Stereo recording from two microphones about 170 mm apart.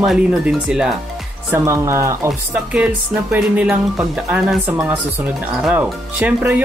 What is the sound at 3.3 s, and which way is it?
Speech, 10° right (ahead or behind).